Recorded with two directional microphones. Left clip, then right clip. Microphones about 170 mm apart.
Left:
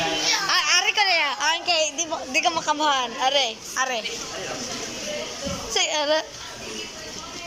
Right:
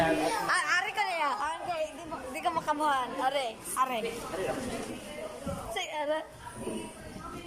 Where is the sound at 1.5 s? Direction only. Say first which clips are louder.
Left 12 dB; 10° left (ahead or behind).